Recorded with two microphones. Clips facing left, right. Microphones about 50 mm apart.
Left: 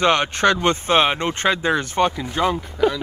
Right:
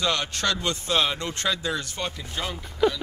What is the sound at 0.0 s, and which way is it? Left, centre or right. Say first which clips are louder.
Speech: left 9 dB; left.